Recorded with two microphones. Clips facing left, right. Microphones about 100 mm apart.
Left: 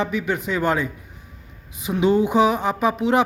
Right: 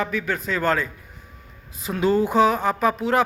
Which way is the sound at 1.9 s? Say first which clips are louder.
Left 2 dB; 20° left (ahead or behind).